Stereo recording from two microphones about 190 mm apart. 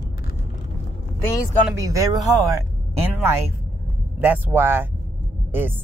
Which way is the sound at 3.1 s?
10° right (ahead or behind).